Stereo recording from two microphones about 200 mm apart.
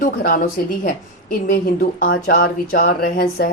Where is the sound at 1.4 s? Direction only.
45° left (ahead or behind).